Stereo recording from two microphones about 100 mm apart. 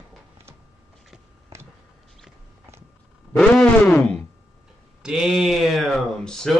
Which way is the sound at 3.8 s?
20° left (ahead or behind).